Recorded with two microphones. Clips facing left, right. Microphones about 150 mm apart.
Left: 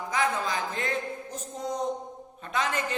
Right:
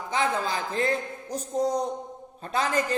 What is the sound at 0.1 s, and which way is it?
A man's voice, 30° right (ahead or behind).